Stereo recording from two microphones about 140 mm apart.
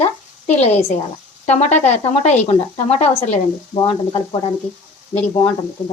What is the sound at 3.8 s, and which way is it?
Speech, 45° left (ahead or behind).